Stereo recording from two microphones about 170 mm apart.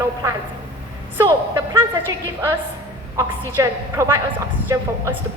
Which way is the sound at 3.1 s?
15° right (ahead or behind).